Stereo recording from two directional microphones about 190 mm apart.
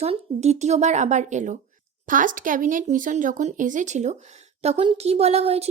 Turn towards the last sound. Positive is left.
turn(degrees=-30)  # may be behind; listen again after turning